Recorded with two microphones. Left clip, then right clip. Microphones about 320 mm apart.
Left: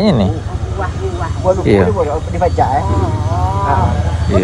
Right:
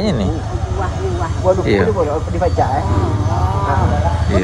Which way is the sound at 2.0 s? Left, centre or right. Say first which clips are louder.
Left 2 dB; left.